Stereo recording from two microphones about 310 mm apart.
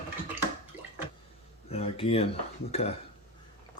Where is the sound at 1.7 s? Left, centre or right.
Centre.